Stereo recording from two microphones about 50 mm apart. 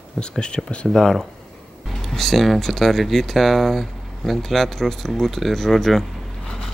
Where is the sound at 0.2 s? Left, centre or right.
Centre.